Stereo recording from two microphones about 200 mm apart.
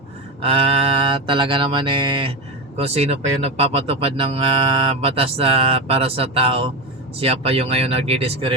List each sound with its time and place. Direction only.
0.4 s speech: 30° right (ahead or behind)